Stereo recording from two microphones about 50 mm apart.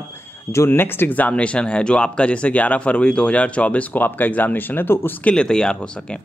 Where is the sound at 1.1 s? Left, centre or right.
Left.